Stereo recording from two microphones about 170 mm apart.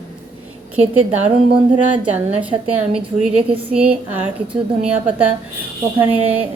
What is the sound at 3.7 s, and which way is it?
A woman's voice, 10° right (ahead or behind).